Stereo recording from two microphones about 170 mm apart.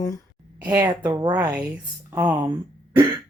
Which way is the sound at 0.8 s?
20° right (ahead or behind).